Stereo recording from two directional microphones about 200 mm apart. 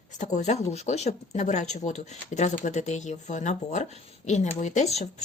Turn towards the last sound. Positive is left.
turn(degrees=35)  # may be behind; listen again after turning